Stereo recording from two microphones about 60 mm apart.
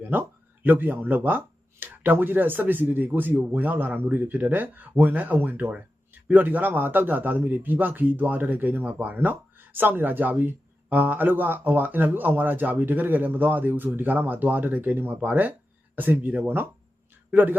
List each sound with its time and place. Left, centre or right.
0.1 s a man's voice: right